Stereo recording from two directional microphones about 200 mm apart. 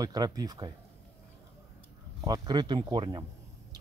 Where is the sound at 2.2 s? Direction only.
20° right (ahead or behind).